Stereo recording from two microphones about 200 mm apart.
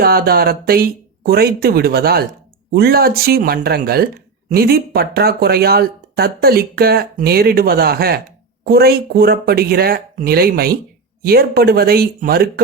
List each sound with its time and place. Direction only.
0.0 s speech: 50° right (ahead or behind)